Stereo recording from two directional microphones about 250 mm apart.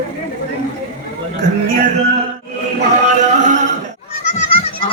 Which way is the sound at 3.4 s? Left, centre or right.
Right.